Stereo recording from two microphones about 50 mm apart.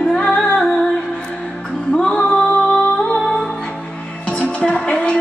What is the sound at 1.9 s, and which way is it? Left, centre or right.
Music, centre.